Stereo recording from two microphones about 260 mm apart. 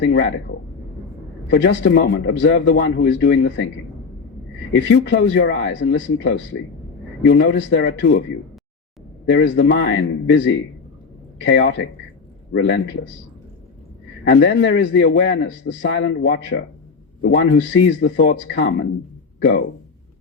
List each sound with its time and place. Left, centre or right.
0.0 s speech: left
1.5 s speech: left
4.7 s speech: left
9.3 s speech: left
14.3 s speech: left